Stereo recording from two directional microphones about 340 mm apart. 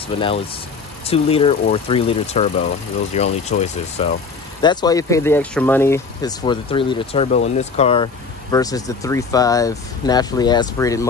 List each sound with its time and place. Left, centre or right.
0.1 s speech: centre